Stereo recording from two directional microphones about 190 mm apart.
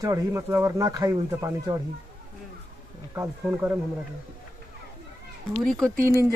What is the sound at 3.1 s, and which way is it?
Speech, 15° right (ahead or behind).